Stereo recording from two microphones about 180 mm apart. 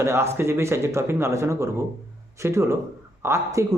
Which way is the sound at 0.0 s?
15° right (ahead or behind).